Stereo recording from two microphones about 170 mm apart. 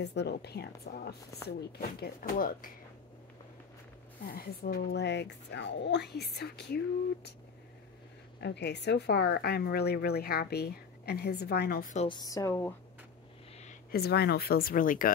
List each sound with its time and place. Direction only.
0.0 s speech: 85° left
0.8 s speech: 60° left (ahead or behind)
4.3 s speech: 65° left (ahead or behind)
8.4 s speech: 80° left
12.1 s speech: 20° left (ahead or behind)
13.9 s speech: 70° left (ahead or behind); by 15.1 s 55° left (ahead or behind)